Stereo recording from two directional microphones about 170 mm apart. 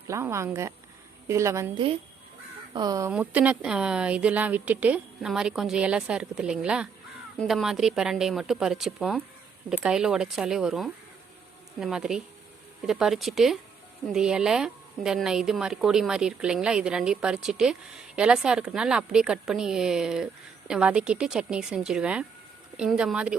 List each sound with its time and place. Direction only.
0.1 s speech: 15° right (ahead or behind)
2.7 s speech: 20° right (ahead or behind)
3.1 s a woman's voice: 10° right (ahead or behind)